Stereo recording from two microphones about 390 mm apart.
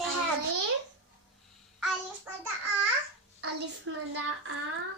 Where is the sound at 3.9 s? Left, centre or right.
Right.